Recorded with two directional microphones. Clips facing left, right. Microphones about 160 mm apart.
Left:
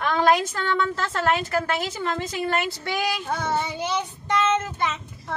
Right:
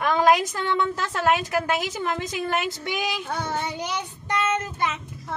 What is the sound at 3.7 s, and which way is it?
Child singing, 15° right (ahead or behind).